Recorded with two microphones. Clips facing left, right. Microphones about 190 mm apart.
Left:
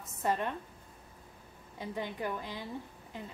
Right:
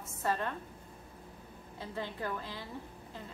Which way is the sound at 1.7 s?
15° left (ahead or behind).